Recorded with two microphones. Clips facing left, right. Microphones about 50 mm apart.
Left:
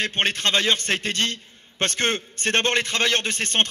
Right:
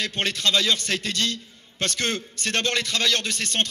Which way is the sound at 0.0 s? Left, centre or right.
Left.